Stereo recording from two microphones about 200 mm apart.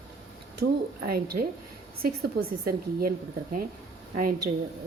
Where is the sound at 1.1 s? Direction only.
50° right (ahead or behind).